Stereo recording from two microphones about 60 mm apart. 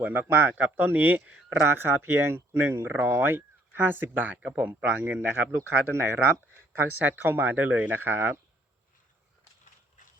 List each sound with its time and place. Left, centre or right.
0.0 s speech: right
0.5 s speech: right
4.4 s speech: right